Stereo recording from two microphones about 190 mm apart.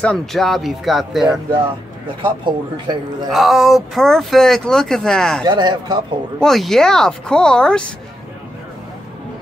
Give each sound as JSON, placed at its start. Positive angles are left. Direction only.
{"t": 0.0, "sound": "speech", "side_deg": 5}
{"t": 2.4, "sound": "speech", "side_deg": -25}
{"t": 3.3, "sound": "speech", "side_deg": 0}
{"t": 5.5, "sound": "speech", "side_deg": -25}
{"t": 6.4, "sound": "speech", "side_deg": 0}